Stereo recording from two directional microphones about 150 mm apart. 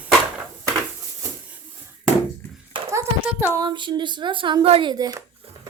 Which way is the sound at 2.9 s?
15° right (ahead or behind).